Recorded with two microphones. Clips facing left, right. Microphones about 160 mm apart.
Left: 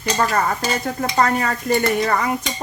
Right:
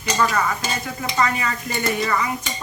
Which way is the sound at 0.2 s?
45° left (ahead or behind).